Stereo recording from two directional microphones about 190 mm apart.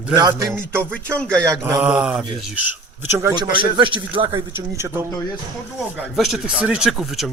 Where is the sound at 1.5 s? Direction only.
15° right (ahead or behind).